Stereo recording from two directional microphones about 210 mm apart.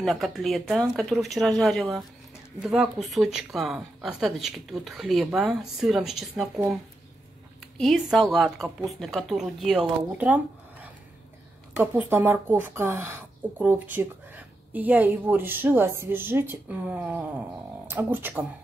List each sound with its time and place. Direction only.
0.0 s speech: centre (ahead or behind)
7.7 s a woman's voice: centre (ahead or behind)